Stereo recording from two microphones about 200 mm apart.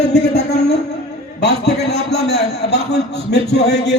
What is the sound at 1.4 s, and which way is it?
A man's voice, 55° left (ahead or behind).